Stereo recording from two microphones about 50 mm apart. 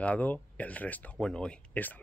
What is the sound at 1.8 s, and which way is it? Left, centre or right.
Speech, left.